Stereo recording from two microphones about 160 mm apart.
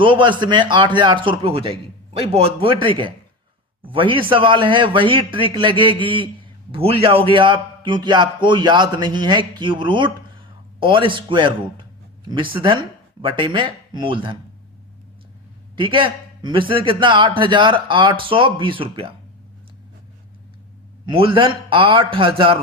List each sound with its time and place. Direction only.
0.0 s a man's voice: 30° right (ahead or behind)
15.7 s a man's voice: 30° right (ahead or behind)
21.1 s a man's voice: 35° right (ahead or behind)